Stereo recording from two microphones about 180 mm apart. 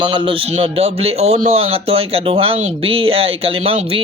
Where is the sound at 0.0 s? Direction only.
30° right (ahead or behind).